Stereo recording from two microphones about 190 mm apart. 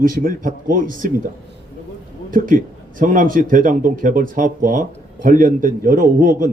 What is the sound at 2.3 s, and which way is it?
A man's voice, 45° right (ahead or behind).